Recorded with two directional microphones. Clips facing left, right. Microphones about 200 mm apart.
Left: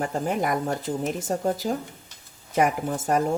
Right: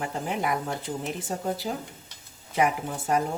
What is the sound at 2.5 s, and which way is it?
Speech, 45° left (ahead or behind).